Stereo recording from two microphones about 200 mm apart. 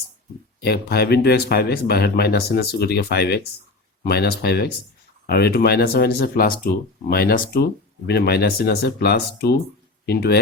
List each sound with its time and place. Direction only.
0.6 s speech: 50° left (ahead or behind)